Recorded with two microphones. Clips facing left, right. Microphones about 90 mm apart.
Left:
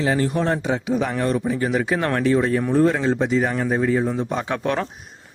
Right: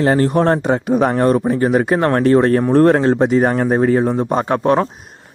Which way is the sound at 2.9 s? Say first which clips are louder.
Right 6 dB; 55° right (ahead or behind).